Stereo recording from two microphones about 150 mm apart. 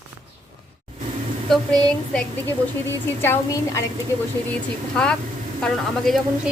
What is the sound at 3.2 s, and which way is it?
Speech, 20° left (ahead or behind).